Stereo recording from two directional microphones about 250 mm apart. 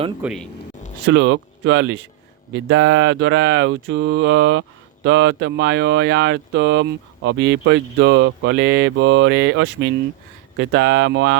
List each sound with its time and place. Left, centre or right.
0.2 s a man's voice: centre
1.0 s speech: right